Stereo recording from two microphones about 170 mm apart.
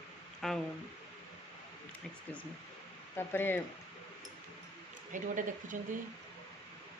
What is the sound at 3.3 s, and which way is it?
Speech, 10° left (ahead or behind).